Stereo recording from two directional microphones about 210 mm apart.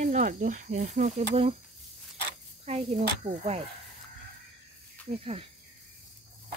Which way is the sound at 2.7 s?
30° right (ahead or behind).